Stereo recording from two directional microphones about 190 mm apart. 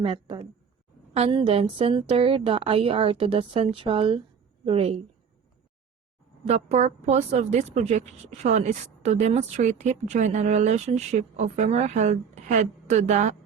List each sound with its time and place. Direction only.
0.0 s a woman's voice: 25° right (ahead or behind)
6.4 s a woman's voice: 35° right (ahead or behind)